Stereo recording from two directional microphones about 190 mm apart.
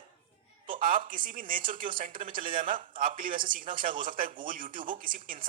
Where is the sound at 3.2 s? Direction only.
25° right (ahead or behind).